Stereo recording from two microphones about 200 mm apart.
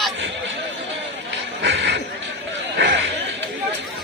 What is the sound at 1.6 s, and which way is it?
Speech, 60° right (ahead or behind).